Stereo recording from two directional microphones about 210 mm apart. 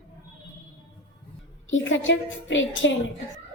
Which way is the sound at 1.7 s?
65° left (ahead or behind).